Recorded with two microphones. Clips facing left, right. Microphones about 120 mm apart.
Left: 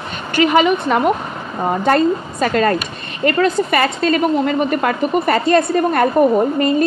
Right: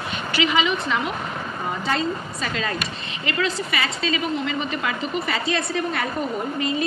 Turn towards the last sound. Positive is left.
turn(degrees=50)  # may be behind; listen again after turning